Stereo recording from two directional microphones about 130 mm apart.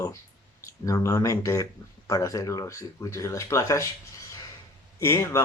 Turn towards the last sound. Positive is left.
turn(degrees=20)  # may be behind; listen again after turning